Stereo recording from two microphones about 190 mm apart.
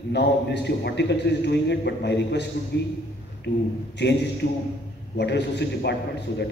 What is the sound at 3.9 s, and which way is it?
A man's voice, 65° left (ahead or behind).